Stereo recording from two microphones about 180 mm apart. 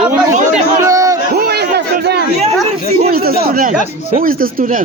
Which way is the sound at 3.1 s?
55° right (ahead or behind).